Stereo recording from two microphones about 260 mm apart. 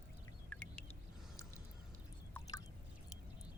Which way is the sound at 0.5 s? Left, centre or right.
Centre.